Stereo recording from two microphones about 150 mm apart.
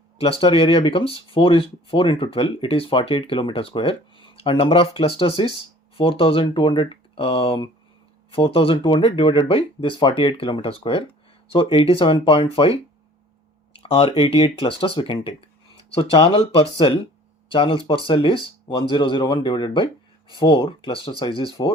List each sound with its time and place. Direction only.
0.2 s speech: 40° left (ahead or behind)
13.9 s speech: 40° left (ahead or behind)